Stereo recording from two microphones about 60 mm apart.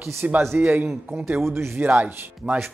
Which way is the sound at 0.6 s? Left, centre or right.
Right.